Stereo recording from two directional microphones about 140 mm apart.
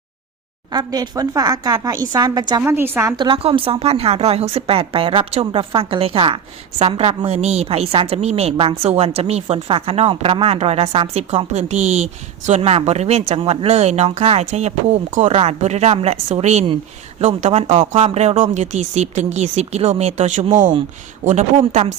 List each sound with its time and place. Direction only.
0.7 s speech: 30° right (ahead or behind)
2.6 s a woman's voice: 15° right (ahead or behind)
3.2 s a woman's voice: 40° right (ahead or behind); by 20.7 s 65° right (ahead or behind)
21.6 s a woman's voice: 55° right (ahead or behind)